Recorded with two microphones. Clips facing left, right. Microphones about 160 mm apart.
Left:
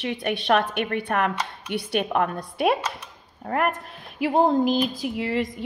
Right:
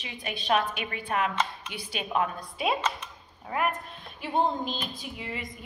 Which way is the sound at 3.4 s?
60° left (ahead or behind).